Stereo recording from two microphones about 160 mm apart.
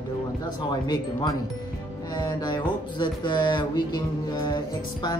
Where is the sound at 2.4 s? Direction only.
25° left (ahead or behind).